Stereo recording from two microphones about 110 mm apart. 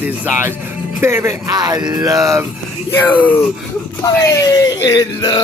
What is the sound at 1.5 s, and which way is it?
Music, 35° right (ahead or behind).